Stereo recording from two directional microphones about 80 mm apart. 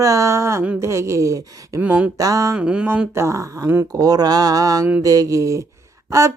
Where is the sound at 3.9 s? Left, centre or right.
Right.